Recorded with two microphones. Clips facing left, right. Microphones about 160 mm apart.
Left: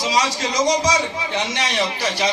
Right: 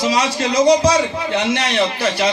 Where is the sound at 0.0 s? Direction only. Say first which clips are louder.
Right 3 dB; 60° right (ahead or behind).